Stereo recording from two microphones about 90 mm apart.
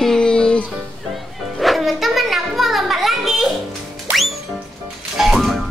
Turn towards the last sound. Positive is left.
turn(degrees=0)  # may be behind; listen again after turning